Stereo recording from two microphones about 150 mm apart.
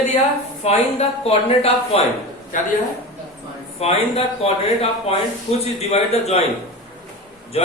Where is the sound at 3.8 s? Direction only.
40° left (ahead or behind).